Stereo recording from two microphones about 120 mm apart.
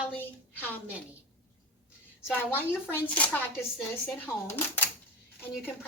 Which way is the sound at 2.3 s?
15° left (ahead or behind).